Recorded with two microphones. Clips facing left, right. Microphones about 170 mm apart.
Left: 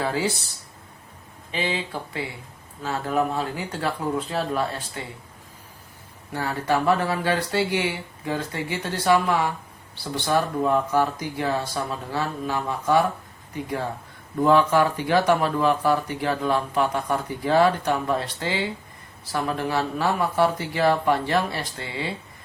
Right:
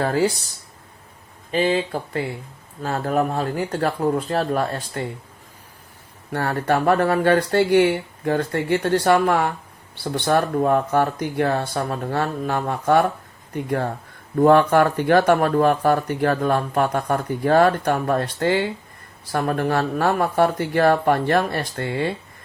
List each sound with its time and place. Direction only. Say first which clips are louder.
0.0 s speech: right 6 dB; 50° right (ahead or behind)
1.5 s speech: right 8 dB; 45° right (ahead or behind)
6.3 s speech: right 3 dB; 60° right (ahead or behind)